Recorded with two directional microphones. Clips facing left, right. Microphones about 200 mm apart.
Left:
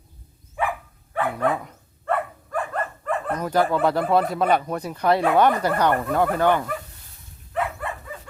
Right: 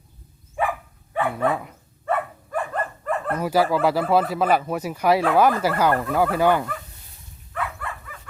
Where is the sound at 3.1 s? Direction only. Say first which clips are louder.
Right 1 dB; 5° right (ahead or behind).